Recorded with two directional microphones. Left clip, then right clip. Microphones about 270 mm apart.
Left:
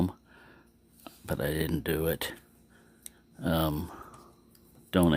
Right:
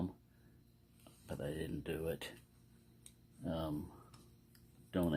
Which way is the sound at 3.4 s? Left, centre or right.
Left.